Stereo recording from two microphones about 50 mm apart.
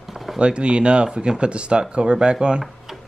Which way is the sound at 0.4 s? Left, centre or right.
Right.